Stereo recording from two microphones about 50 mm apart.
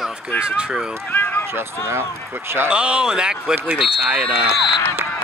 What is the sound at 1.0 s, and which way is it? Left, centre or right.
Run, left.